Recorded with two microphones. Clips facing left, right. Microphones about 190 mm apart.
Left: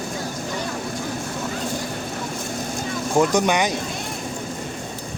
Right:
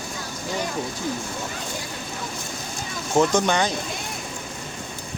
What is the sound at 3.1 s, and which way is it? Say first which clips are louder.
Speech: left 1 dB; 15° left (ahead or behind).